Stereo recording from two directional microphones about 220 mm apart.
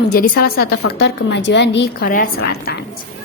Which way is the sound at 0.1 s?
40° left (ahead or behind).